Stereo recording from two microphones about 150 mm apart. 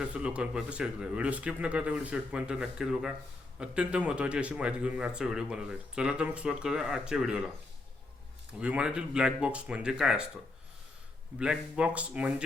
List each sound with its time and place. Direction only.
0.0 s speech: 5° right (ahead or behind)
8.5 s speech: 5° right (ahead or behind)
11.3 s speech: 5° right (ahead or behind)